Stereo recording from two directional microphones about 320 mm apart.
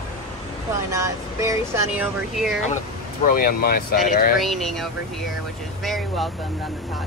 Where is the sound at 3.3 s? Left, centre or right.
Left.